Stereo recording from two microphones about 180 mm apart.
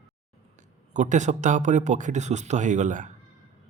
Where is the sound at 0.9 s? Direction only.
40° right (ahead or behind).